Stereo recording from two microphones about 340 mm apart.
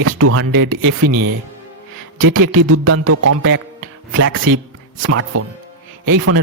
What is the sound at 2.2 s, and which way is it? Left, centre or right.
A man's voice, right.